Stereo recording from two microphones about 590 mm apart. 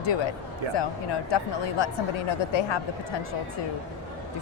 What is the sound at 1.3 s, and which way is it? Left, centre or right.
A woman's voice, left.